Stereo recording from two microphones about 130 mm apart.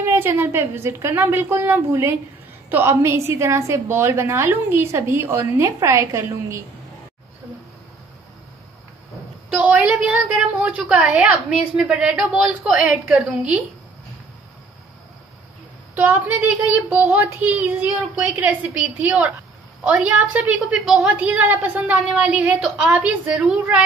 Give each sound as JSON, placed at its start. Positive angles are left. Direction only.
{"t": 0.0, "sound": "a woman's voice", "side_deg": -20}
{"t": 9.5, "sound": "a woman's voice", "side_deg": -10}
{"t": 15.9, "sound": "a woman's voice", "side_deg": -15}